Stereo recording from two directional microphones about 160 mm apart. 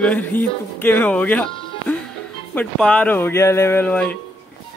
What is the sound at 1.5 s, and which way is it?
Music, 35° left (ahead or behind).